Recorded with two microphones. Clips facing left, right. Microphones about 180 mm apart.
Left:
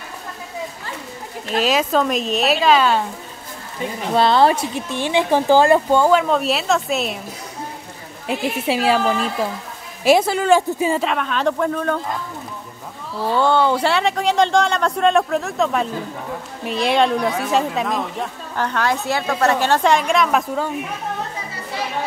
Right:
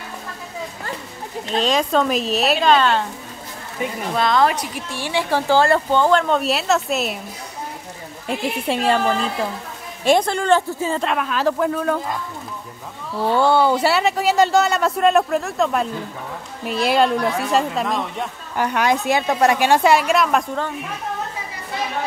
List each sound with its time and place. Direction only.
1.6 s a man's voice: 5° left (ahead or behind)
4.1 s a woman's voice: 30° left (ahead or behind); by 7.2 s centre (ahead or behind)
8.3 s a man's voice: 5° left (ahead or behind)
11.1 s a man's voice: 5° right (ahead or behind)
13.3 s a man's voice: 10° right (ahead or behind)
18.6 s a woman's voice: 15° right (ahead or behind); by 20.7 s 5° left (ahead or behind)